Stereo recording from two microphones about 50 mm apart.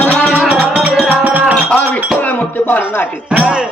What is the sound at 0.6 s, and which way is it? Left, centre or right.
Music, right.